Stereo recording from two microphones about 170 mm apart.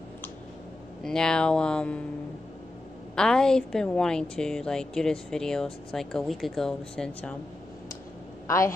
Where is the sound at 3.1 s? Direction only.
5° left (ahead or behind).